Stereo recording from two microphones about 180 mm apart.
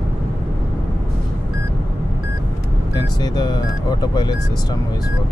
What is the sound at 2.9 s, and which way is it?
Speech, 20° left (ahead or behind).